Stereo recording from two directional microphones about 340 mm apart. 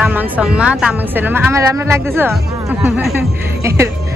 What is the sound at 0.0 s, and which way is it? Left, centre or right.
A woman's voice, centre.